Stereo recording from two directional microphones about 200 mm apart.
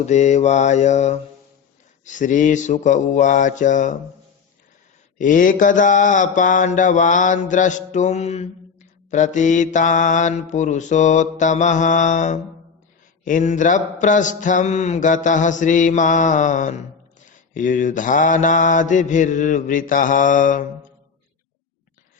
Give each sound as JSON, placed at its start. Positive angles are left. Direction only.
{"t": 0.0, "sound": "mantra", "side_deg": 35}
{"t": 5.1, "sound": "mantra", "side_deg": 40}